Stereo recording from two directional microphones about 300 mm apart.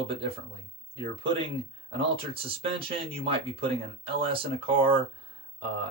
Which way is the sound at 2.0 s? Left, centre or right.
Centre.